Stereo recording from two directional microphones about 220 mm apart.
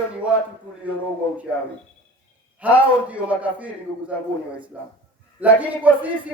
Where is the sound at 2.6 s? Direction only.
5° right (ahead or behind).